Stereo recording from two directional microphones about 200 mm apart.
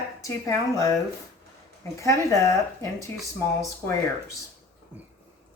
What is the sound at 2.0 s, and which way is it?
Speech, 15° left (ahead or behind).